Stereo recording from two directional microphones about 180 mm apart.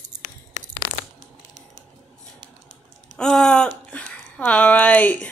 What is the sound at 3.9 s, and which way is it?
Speech, 5° left (ahead or behind).